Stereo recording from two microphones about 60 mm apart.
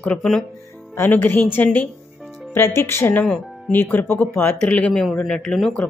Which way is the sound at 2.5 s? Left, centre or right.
Left.